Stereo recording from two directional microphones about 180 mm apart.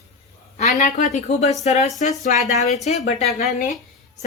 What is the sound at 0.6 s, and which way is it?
A woman's voice, 40° left (ahead or behind).